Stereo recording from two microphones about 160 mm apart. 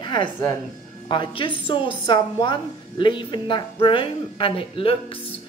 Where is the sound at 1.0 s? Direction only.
30° left (ahead or behind).